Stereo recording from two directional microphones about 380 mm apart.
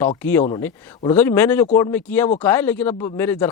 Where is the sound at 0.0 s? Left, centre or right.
Centre.